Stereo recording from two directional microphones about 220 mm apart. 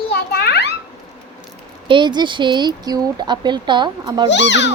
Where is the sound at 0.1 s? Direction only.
50° left (ahead or behind).